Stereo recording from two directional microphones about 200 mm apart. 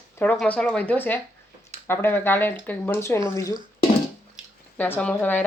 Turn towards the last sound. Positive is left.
turn(degrees=5)  # may be behind; listen again after turning